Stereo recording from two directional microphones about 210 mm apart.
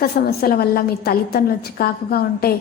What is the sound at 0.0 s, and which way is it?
A woman's voice, 45° left (ahead or behind).